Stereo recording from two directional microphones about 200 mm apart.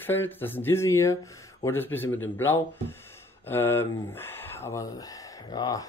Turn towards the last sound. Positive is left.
turn(degrees=20)  # may be behind; listen again after turning